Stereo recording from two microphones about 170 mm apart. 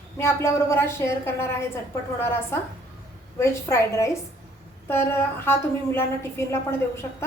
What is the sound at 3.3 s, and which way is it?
A woman's voice, 15° left (ahead or behind).